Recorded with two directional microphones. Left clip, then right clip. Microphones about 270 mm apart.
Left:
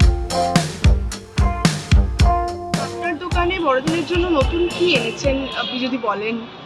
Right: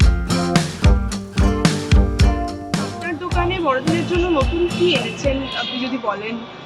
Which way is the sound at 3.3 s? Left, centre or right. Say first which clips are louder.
Left 1 dB; left.